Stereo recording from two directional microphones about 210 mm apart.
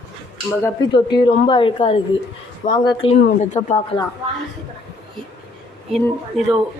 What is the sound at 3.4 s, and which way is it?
Speech, 35° left (ahead or behind).